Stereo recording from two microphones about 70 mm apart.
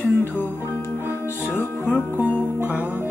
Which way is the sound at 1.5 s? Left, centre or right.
Left.